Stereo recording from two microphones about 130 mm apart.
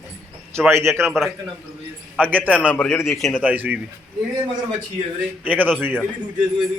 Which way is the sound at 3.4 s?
10° right (ahead or behind).